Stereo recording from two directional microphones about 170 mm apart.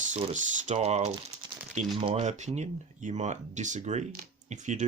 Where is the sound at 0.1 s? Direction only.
45° right (ahead or behind).